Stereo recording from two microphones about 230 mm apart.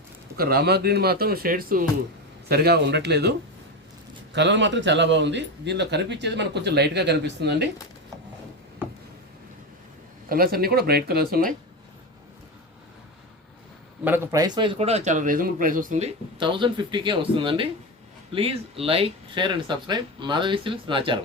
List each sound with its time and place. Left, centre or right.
0.3 s speech: right
10.2 s speech: right
14.0 s speech: centre; by 16.0 s right
16.4 s speech: right